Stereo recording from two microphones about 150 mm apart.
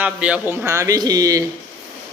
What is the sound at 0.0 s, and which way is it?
Speech, 10° right (ahead or behind).